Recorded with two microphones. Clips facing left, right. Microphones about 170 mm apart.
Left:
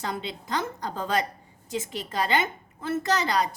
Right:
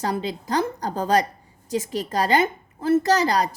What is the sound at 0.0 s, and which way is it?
A woman's voice, 40° right (ahead or behind).